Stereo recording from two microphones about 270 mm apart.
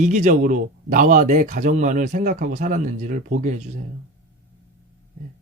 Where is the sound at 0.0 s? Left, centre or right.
Right.